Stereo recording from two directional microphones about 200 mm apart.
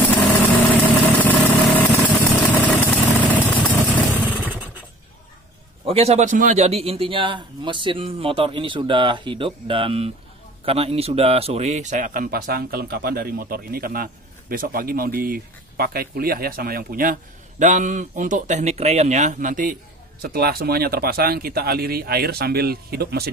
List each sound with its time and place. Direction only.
0.8 s vehicle: 10° left (ahead or behind)
4.5 s a sound: 10° right (ahead or behind)
5.9 s a man's voice: 30° right (ahead or behind); by 23.3 s 50° right (ahead or behind)